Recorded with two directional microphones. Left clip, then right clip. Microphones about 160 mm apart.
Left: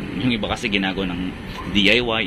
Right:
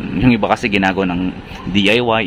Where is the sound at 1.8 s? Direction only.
20° right (ahead or behind).